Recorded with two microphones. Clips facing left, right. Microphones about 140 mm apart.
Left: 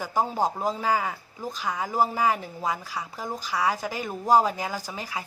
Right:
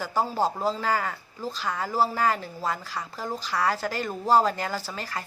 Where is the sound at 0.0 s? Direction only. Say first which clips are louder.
Even; 15° left (ahead or behind).